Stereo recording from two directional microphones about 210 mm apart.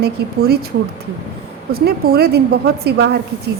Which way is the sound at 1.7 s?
50° right (ahead or behind).